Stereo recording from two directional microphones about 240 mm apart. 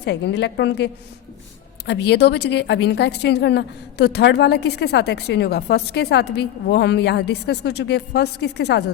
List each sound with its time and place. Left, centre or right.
0.0 s a woman's voice: left
1.9 s a woman's voice: left